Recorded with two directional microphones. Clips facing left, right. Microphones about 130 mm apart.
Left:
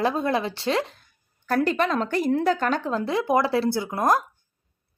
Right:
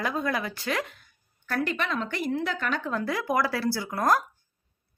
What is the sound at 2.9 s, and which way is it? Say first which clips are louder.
Speech: left 4 dB; 25° left (ahead or behind).